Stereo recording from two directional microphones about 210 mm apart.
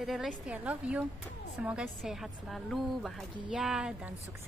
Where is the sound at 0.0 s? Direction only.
Centre (ahead or behind).